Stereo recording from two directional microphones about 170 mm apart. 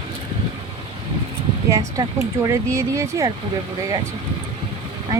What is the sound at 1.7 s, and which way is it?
Speech, 20° right (ahead or behind).